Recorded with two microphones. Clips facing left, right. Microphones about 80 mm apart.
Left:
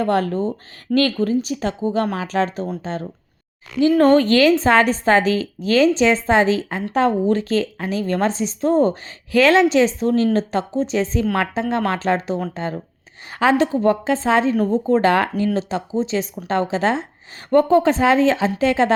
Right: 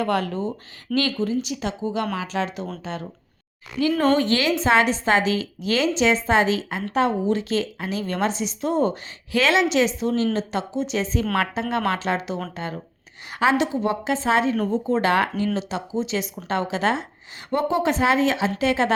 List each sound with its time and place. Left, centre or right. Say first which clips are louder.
0.0 s a woman's voice: left 4 dB; left
4.0 s a woman's voice: left 7 dB; left
17.5 s a woman's voice: left 7 dB; left